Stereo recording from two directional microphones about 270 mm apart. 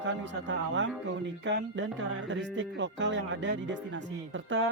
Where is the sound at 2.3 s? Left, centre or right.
Right.